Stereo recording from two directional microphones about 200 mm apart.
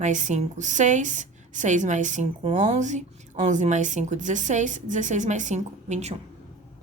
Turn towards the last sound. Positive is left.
turn(degrees=-35)  # may be behind; listen again after turning